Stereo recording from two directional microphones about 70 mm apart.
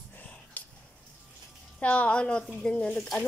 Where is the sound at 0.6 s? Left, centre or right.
Left.